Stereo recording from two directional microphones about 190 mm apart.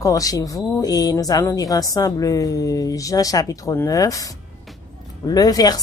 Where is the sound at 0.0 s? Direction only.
20° left (ahead or behind).